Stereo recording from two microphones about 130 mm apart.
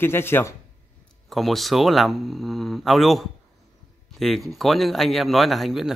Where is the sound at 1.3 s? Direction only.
Centre (ahead or behind).